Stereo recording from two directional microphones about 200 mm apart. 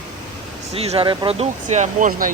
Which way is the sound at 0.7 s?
30° right (ahead or behind).